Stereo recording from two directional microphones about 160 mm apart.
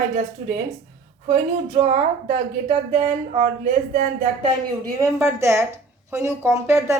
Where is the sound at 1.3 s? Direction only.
40° right (ahead or behind).